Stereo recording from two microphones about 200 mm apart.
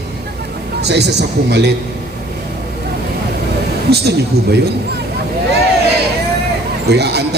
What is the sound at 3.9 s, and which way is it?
Speech, 55° right (ahead or behind).